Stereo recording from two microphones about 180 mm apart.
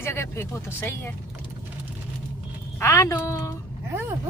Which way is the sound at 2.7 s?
15° left (ahead or behind).